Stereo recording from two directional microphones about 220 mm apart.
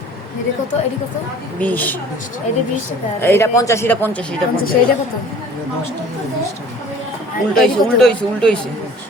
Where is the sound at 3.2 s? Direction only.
10° left (ahead or behind).